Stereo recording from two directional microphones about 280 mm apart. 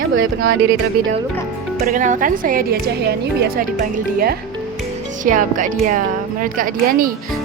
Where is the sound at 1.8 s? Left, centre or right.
Right.